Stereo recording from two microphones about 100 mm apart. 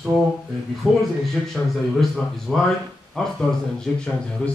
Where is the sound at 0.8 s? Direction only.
5° right (ahead or behind).